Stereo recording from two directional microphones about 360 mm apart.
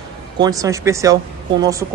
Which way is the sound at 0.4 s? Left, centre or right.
Centre.